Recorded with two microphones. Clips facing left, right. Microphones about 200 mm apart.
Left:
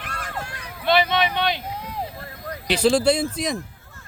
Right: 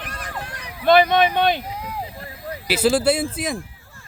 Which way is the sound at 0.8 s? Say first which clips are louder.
Right 5 dB; 50° right (ahead or behind).